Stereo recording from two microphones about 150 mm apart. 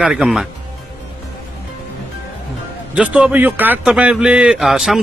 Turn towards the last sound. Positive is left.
turn(degrees=0)  # may be behind; listen again after turning